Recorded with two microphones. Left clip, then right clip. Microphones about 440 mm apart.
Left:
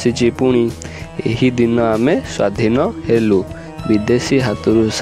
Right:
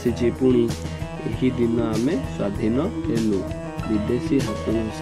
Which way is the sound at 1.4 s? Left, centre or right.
Left.